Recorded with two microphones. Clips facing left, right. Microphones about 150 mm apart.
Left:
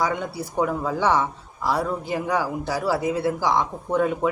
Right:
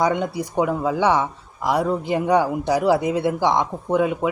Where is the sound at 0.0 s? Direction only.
20° right (ahead or behind).